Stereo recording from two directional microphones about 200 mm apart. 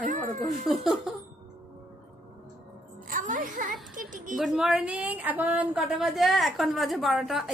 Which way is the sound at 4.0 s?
40° right (ahead or behind).